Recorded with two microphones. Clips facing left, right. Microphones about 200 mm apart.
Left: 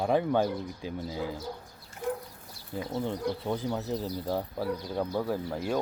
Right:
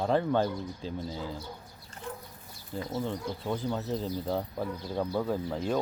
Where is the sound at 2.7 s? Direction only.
15° left (ahead or behind).